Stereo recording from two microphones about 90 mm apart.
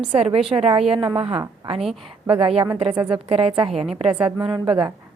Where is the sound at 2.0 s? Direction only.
85° right.